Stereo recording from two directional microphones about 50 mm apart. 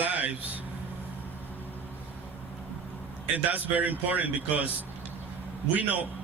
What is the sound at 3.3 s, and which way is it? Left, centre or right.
A man's voice, right.